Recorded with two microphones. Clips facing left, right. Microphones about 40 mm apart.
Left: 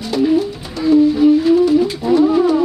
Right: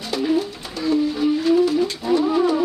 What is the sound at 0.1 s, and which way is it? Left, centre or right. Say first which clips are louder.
Music: left 6 dB; centre.